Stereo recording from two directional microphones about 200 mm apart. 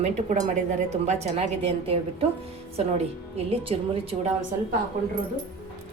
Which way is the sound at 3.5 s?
30° right (ahead or behind).